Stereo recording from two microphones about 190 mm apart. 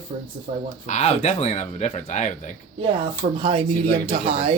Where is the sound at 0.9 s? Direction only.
35° left (ahead or behind).